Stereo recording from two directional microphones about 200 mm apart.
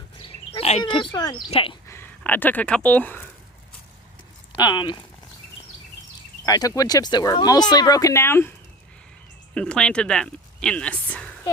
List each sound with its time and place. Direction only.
0.2 s a sound: 30° left (ahead or behind)
1.5 s speech: 30° left (ahead or behind)
1.9 s speech: 10° left (ahead or behind)
4.5 s speech: 20° left (ahead or behind)
6.4 s speech: 15° left (ahead or behind)
9.6 s speech: 5° left (ahead or behind)